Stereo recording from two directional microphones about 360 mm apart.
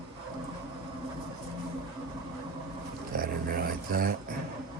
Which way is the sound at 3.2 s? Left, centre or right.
Right.